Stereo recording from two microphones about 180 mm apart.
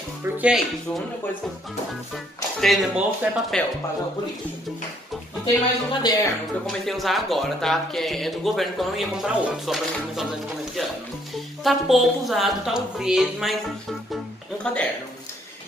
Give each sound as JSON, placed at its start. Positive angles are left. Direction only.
{"t": 0.4, "sound": "speech", "side_deg": -5}
{"t": 2.6, "sound": "speech", "side_deg": 0}
{"t": 5.4, "sound": "speech", "side_deg": 25}
{"t": 6.6, "sound": "speech", "side_deg": 0}
{"t": 11.6, "sound": "speech", "side_deg": 0}
{"t": 14.6, "sound": "speech", "side_deg": 5}